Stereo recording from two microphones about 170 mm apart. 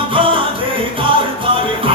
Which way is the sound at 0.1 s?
30° right (ahead or behind).